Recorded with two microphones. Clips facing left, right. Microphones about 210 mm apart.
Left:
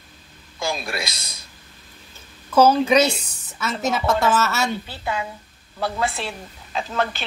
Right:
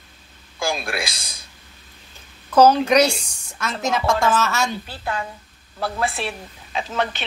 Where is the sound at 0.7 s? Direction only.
Centre (ahead or behind).